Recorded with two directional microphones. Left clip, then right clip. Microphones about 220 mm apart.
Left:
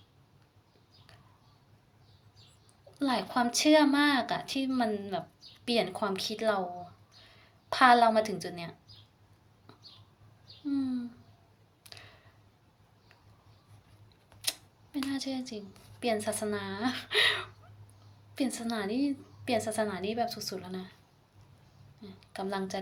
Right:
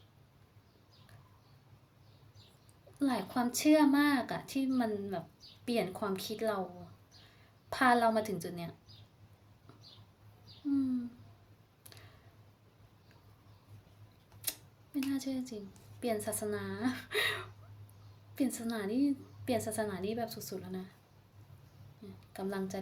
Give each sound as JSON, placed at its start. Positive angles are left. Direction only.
{"t": 3.0, "sound": "a woman's voice", "side_deg": -20}
{"t": 7.7, "sound": "a woman's voice", "side_deg": -15}
{"t": 15.1, "sound": "a woman's voice", "side_deg": -20}
{"t": 22.0, "sound": "a woman's voice", "side_deg": -15}